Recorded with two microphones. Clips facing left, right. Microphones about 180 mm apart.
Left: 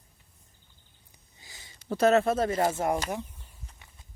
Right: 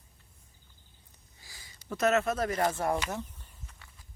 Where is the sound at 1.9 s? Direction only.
30° left (ahead or behind).